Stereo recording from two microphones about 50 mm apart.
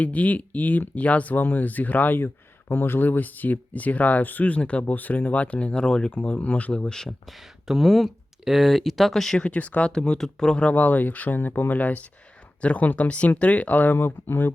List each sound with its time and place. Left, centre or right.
0.0 s speech: left; by 6.1 s centre
6.1 s speech: left
6.8 s speech: centre
7.3 s speech: centre
9.4 s speech: left
9.9 s speech: centre; by 14.5 s left